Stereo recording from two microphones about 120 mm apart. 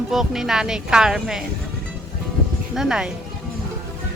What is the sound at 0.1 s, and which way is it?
Speech, 5° right (ahead or behind).